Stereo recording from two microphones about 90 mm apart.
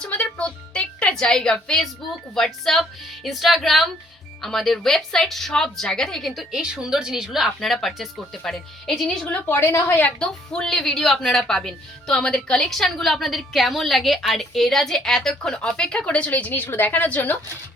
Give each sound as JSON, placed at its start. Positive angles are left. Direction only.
{"t": 0.0, "sound": "a sound", "side_deg": 10}
{"t": 2.3, "sound": "speech", "side_deg": 5}
{"t": 6.6, "sound": "speech", "side_deg": -10}
{"t": 9.3, "sound": "a woman's voice", "side_deg": 20}
{"t": 10.2, "sound": "speech", "side_deg": 5}